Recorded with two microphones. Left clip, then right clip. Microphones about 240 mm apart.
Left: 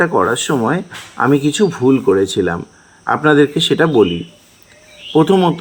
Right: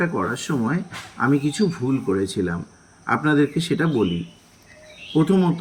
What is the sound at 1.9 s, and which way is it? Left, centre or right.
Speech, left.